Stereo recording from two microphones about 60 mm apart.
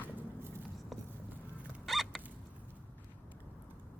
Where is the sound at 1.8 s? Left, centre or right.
Centre.